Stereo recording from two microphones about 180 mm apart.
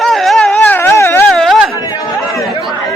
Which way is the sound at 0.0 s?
Centre (ahead or behind).